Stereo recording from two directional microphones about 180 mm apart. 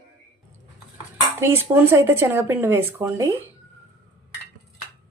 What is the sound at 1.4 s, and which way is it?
Dishes, 15° right (ahead or behind).